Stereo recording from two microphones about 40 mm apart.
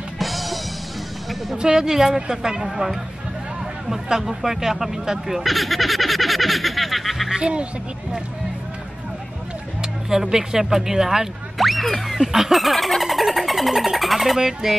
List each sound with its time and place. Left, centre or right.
0.2 s music: centre
1.6 s speech: centre
3.9 s speech: centre
5.4 s speech: centre
7.2 s speech: right
9.8 s speech: centre
11.5 s music: centre
12.2 s a sound: centre